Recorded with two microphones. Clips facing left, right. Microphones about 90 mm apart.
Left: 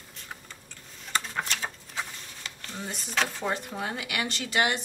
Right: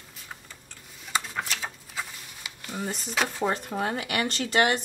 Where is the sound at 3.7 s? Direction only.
50° right (ahead or behind).